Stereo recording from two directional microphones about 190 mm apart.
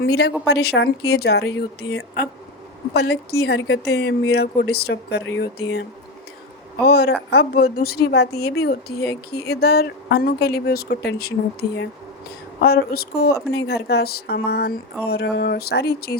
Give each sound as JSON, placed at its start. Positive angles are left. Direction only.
{"t": 0.0, "sound": "speech", "side_deg": 60}
{"t": 6.8, "sound": "speech", "side_deg": 55}
{"t": 12.5, "sound": "speech", "side_deg": 55}